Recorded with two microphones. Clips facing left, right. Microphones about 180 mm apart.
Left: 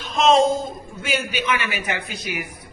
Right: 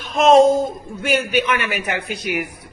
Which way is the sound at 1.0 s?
55° right (ahead or behind).